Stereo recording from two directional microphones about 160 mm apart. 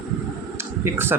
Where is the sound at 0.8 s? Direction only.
15° right (ahead or behind).